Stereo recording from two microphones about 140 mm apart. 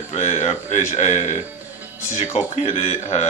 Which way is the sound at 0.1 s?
55° left (ahead or behind).